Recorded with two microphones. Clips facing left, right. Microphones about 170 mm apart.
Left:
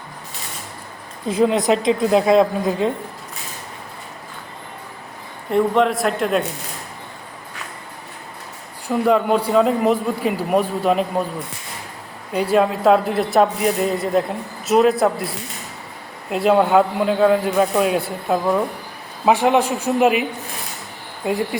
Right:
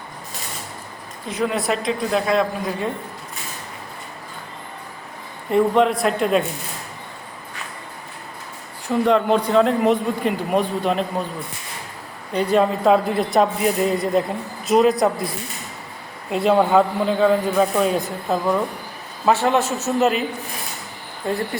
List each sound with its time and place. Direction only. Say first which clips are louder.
1.3 s a woman's voice: left 6 dB; 25° left (ahead or behind)
5.5 s speech: even; centre (ahead or behind)
9.0 s speech: left 1 dB; 5° left (ahead or behind)
12.3 s speech: left 1 dB; 5° left (ahead or behind)
16.3 s a man's voice: left 1 dB; centre (ahead or behind)